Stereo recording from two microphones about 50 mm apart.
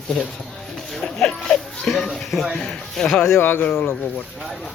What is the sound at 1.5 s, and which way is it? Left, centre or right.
A child's voice, centre.